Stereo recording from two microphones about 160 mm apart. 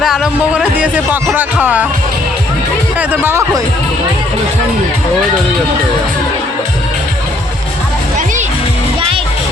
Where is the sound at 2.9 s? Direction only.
10° right (ahead or behind).